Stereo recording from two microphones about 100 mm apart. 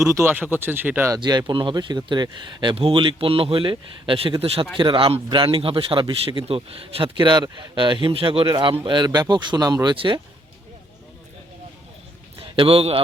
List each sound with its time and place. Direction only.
0.0 s speech: 30° right (ahead or behind)
1.1 s a man's voice: 45° right (ahead or behind); by 4.6 s 75° right (ahead or behind)
4.8 s a man's voice: 60° right (ahead or behind); by 9.9 s 40° right (ahead or behind)
9.9 s a man's voice: 60° right (ahead or behind)
12.4 s a man's voice: 70° right (ahead or behind)